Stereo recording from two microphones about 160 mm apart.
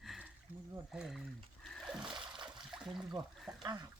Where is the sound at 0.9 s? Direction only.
Centre (ahead or behind).